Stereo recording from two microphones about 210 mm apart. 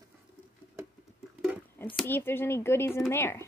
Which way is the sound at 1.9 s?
10° left (ahead or behind).